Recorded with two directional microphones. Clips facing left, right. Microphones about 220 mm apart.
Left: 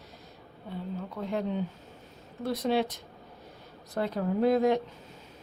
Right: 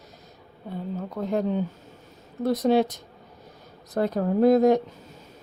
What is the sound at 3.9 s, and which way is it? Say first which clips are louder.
Speech: right 6 dB; 45° right (ahead or behind).